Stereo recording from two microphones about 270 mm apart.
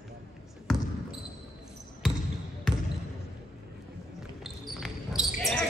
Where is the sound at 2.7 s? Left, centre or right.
Centre.